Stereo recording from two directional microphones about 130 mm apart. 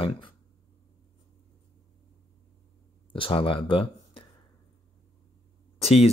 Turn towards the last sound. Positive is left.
turn(degrees=50)  # may be behind; listen again after turning